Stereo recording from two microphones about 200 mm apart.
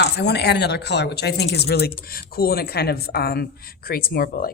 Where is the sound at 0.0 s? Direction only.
55° left (ahead or behind).